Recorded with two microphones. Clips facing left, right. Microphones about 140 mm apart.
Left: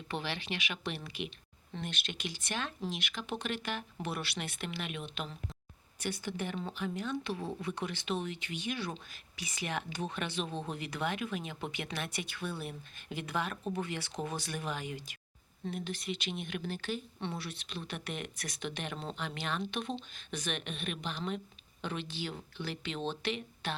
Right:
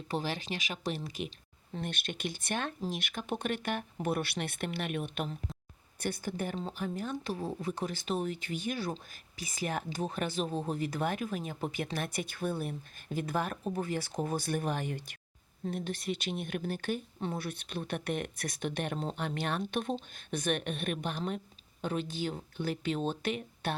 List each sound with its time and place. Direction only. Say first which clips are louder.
0.1 s speech: right 3 dB; 40° right (ahead or behind)